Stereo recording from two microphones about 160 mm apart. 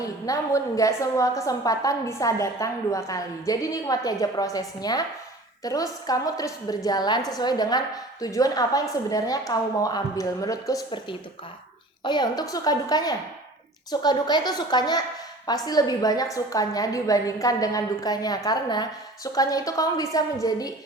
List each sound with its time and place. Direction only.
0.0 s a woman's voice: 20° left (ahead or behind)